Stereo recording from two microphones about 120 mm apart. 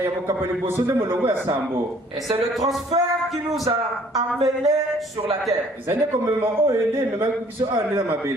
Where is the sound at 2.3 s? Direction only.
30° right (ahead or behind).